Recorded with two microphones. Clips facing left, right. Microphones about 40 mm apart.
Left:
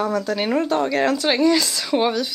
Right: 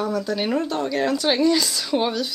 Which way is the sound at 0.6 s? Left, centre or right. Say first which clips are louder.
Left 4 dB; left.